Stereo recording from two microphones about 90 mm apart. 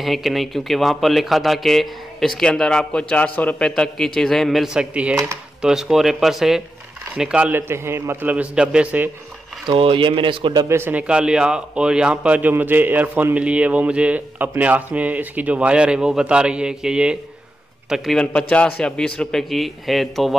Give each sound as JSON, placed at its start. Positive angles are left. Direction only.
{"t": 0.0, "sound": "a man's voice", "side_deg": 0}
{"t": 7.5, "sound": "a man's voice", "side_deg": -25}
{"t": 9.7, "sound": "speech", "side_deg": -80}
{"t": 10.7, "sound": "a man's voice", "side_deg": -25}
{"t": 11.0, "sound": "a man's voice", "side_deg": -10}
{"t": 18.1, "sound": "a man's voice", "side_deg": 10}